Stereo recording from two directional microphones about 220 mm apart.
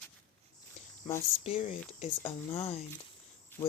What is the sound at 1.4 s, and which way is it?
Speech, 30° left (ahead or behind).